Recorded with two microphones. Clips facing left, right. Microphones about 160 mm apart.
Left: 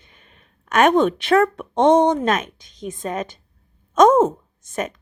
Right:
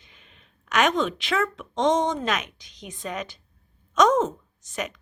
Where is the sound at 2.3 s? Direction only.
50° left (ahead or behind).